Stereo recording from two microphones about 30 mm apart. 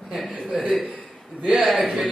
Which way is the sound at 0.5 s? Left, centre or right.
Centre.